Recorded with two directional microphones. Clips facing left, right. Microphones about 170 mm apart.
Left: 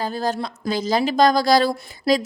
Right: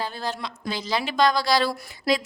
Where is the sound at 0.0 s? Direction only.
45° left (ahead or behind).